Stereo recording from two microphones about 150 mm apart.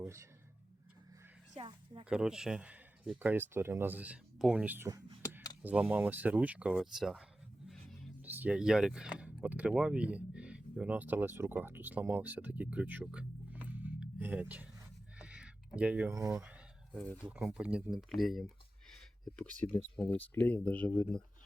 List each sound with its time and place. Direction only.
0.0 s speech: 20° right (ahead or behind)
1.5 s a woman's voice: 35° right (ahead or behind)
2.0 s speech: 5° right (ahead or behind)
7.7 s music: centre (ahead or behind)
8.2 s speech: 10° right (ahead or behind)
15.2 s a sound: 5° right (ahead or behind)
16.1 s speech: 20° right (ahead or behind)
16.4 s a sound: 5° right (ahead or behind)
17.3 s speech: 5° right (ahead or behind); by 21.2 s 10° left (ahead or behind)